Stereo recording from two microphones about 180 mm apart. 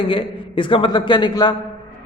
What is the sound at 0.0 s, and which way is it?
A man's voice, 30° left (ahead or behind).